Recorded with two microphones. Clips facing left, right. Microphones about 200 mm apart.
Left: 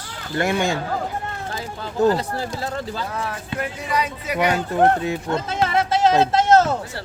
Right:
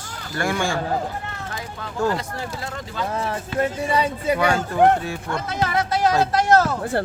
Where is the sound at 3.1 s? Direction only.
25° right (ahead or behind).